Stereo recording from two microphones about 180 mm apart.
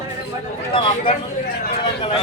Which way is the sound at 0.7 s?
30° left (ahead or behind).